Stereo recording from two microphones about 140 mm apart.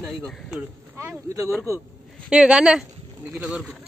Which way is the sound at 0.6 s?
20° right (ahead or behind).